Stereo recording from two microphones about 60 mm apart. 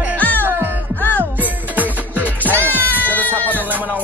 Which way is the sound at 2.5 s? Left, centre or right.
Left.